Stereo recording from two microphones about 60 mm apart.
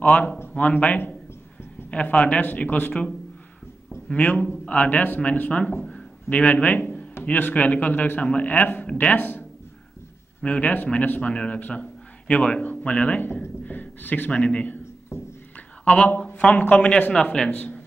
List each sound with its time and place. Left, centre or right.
0.0 s a man's voice: left
1.9 s a man's voice: left
4.1 s a man's voice: left
5.8 s speech: centre
6.2 s a man's voice: left
14.3 s a man's voice: centre
15.1 s speech: left
16.3 s speech: centre